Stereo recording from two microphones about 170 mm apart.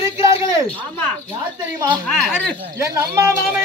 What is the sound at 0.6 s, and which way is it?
Speech, 10° left (ahead or behind).